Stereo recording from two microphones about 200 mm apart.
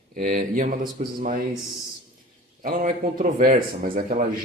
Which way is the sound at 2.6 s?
45° right (ahead or behind).